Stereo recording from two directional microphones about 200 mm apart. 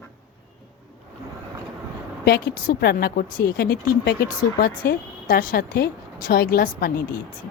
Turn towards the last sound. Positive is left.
turn(degrees=50)  # may be behind; listen again after turning